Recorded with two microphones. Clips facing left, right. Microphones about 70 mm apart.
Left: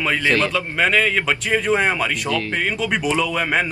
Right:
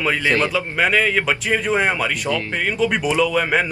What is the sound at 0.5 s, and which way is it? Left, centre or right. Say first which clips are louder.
Speech: even; centre.